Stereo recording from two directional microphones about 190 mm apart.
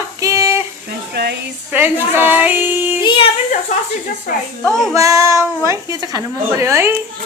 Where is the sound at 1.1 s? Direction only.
60° right (ahead or behind).